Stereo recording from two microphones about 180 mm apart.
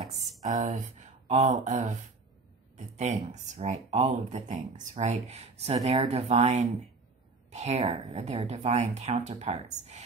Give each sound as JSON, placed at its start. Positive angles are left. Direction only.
{"t": 0.4, "sound": "speech", "side_deg": -40}
{"t": 3.0, "sound": "speech", "side_deg": -40}